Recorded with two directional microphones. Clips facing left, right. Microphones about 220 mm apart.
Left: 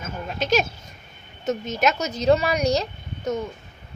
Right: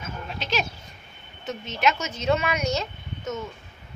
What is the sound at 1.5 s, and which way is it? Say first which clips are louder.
A woman's voice: left 3 dB; 40° left (ahead or behind).